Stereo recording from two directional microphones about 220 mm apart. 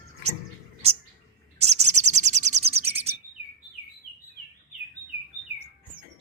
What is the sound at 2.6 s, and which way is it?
Bird, 25° right (ahead or behind).